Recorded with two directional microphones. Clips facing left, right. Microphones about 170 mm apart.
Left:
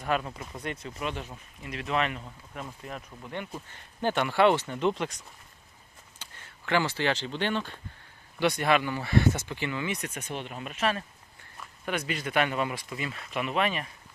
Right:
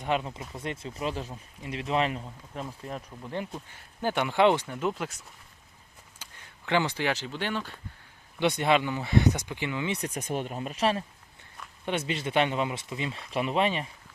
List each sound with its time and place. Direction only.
0.0 s speech: 20° right (ahead or behind)
3.7 s speech: 10° right (ahead or behind)
8.4 s speech: 20° right (ahead or behind)
9.9 s speech: 35° right (ahead or behind)